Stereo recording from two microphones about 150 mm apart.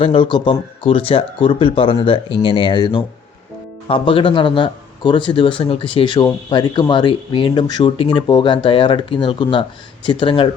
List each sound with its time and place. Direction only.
0.0 s speech: 35° left (ahead or behind)